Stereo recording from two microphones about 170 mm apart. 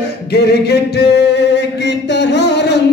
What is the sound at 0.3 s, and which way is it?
Music, 75° left (ahead or behind).